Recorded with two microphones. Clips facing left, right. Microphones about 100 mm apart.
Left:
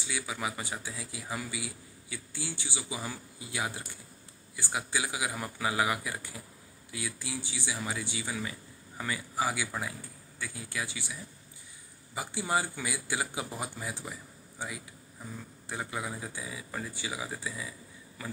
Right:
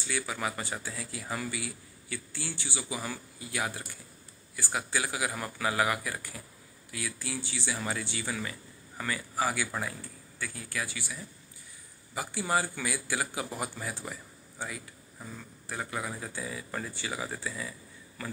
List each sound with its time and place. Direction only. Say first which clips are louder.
0.0 s speech: right 2 dB; 10° left (ahead or behind)